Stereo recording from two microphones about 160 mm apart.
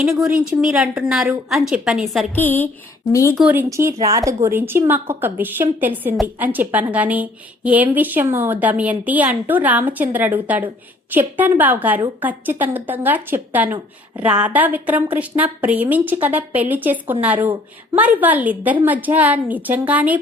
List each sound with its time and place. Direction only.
0.0 s a woman's voice: centre (ahead or behind)
2.3 s a woman's voice: 10° left (ahead or behind)
3.3 s a woman's voice: 10° right (ahead or behind)